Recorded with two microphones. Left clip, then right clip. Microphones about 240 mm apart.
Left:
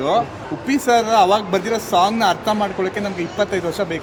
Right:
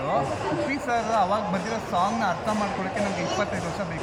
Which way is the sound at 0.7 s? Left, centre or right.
Left.